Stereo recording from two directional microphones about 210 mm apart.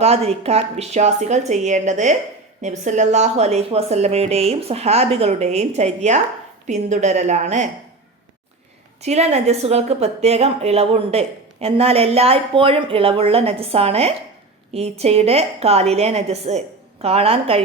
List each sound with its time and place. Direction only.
0.0 s speech: 30° right (ahead or behind)
9.0 s a woman's voice: 30° right (ahead or behind)